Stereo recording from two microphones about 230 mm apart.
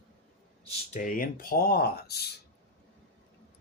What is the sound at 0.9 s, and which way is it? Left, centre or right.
Speech, left.